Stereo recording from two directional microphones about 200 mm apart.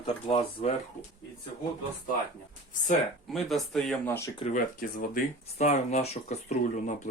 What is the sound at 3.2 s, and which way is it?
Speech, centre (ahead or behind).